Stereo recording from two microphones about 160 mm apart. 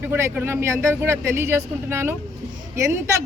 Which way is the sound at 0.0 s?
15° right (ahead or behind).